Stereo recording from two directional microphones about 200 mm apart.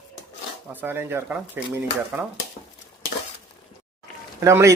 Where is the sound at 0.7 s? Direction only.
10° right (ahead or behind).